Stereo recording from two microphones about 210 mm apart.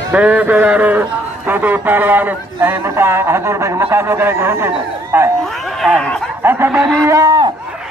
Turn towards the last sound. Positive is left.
turn(degrees=-20)  # may be behind; listen again after turning